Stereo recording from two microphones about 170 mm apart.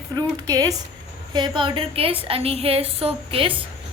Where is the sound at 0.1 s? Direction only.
20° right (ahead or behind).